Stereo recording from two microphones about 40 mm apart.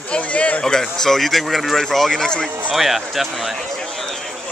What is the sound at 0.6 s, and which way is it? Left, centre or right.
Speech, centre.